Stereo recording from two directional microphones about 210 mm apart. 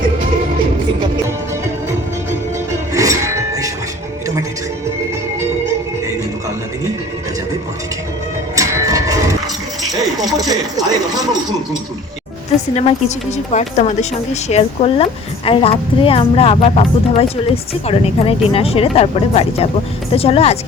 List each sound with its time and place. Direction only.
2.9 s music: 15° right (ahead or behind)
8.5 s a sound: 15° right (ahead or behind)
9.8 s speech: 15° right (ahead or behind)
12.7 s a woman's voice: 35° left (ahead or behind)